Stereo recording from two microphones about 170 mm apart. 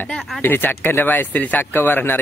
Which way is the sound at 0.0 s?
5° left (ahead or behind).